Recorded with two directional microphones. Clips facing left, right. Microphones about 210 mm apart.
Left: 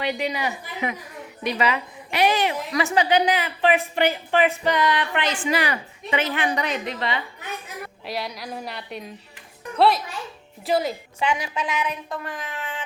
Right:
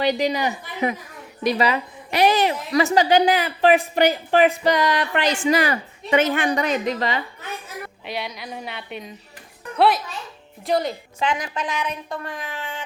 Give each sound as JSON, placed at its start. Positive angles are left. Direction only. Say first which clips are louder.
{"t": 0.0, "sound": "speech", "louder": "right 5 dB", "side_deg": -35}
{"t": 8.0, "sound": "a woman's voice", "louder": "left 1 dB", "side_deg": 0}